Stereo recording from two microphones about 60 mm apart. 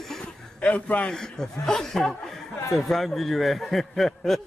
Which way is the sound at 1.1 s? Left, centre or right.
Centre.